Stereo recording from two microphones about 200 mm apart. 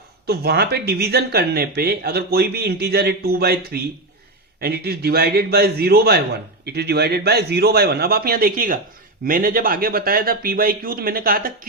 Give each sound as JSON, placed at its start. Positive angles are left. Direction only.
{"t": 0.3, "sound": "speech", "side_deg": -55}